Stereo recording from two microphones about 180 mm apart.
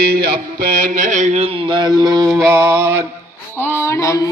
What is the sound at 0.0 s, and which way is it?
Mantra, 60° right (ahead or behind).